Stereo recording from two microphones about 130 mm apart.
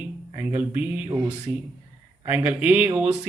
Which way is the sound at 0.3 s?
15° right (ahead or behind).